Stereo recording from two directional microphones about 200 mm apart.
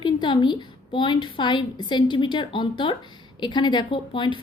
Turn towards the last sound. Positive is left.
turn(degrees=25)  # may be behind; listen again after turning